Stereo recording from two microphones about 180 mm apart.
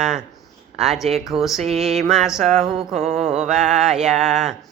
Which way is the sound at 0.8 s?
Centre (ahead or behind).